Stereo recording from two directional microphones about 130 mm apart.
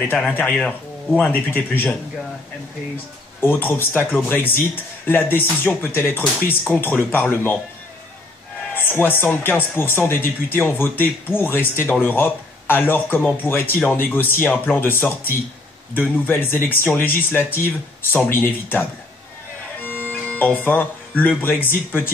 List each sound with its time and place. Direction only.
0.0 s speech: 10° left (ahead or behind)
3.3 s speech: 15° left (ahead or behind)
8.7 s speech: 15° left (ahead or behind)
19.8 s music: 15° left (ahead or behind)
21.4 s speech: 15° left (ahead or behind)